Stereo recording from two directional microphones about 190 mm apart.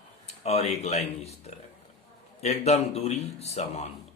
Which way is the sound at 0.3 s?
35° left (ahead or behind).